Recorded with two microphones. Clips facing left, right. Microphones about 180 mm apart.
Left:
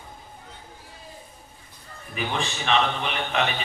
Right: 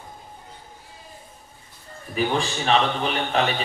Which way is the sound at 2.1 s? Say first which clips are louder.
Right 5 dB; 35° right (ahead or behind).